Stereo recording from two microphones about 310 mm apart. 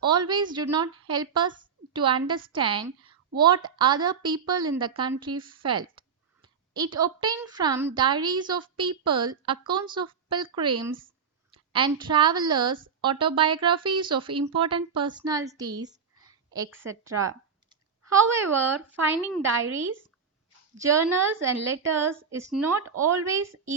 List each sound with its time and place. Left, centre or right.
0.0 s a woman's voice: centre
20.7 s a woman's voice: centre